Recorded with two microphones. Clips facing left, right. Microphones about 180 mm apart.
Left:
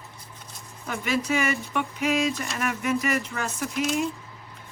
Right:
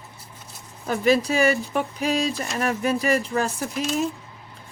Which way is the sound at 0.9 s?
35° right (ahead or behind).